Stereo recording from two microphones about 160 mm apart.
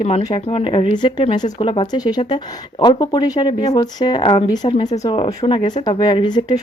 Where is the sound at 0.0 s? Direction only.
40° left (ahead or behind).